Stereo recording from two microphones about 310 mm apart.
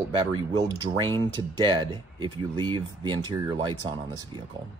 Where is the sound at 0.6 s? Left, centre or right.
Centre.